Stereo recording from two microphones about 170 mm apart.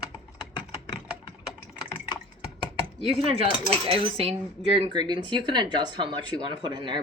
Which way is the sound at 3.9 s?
35° right (ahead or behind).